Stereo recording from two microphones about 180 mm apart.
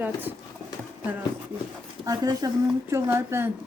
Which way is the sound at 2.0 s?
20° right (ahead or behind).